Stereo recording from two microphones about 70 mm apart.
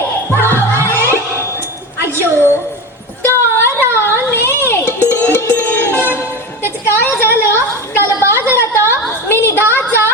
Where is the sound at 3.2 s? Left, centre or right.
Left.